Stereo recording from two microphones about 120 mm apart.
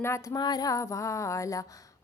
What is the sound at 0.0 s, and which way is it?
Female singing, 25° left (ahead or behind).